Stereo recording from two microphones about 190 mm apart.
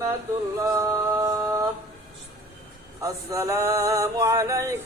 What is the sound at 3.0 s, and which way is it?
Male singing, 15° right (ahead or behind).